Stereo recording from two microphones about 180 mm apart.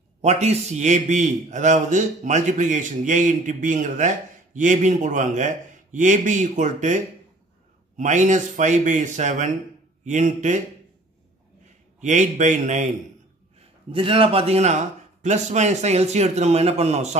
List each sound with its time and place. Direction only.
0.2 s a man's voice: 35° right (ahead or behind)
8.0 s a man's voice: 45° right (ahead or behind)
12.0 s a man's voice: 45° right (ahead or behind)
13.9 s a man's voice: 30° right (ahead or behind)